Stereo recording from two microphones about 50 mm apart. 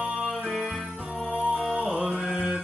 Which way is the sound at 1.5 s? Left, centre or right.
Right.